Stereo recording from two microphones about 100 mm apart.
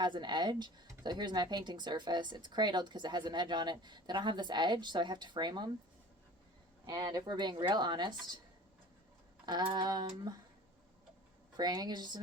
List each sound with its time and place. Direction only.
0.0 s speech: 45° right (ahead or behind)
6.8 s speech: 40° right (ahead or behind)
9.5 s speech: 50° right (ahead or behind)
11.5 s speech: 45° right (ahead or behind)